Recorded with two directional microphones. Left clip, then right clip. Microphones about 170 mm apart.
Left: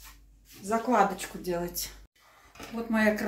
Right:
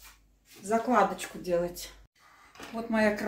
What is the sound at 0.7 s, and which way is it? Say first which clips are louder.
Speech: even; 15° left (ahead or behind).